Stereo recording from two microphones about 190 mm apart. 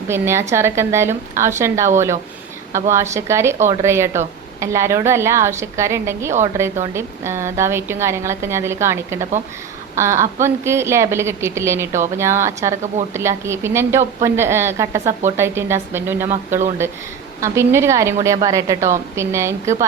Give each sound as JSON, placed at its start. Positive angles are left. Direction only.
{"t": 0.1, "sound": "a woman's voice", "side_deg": -15}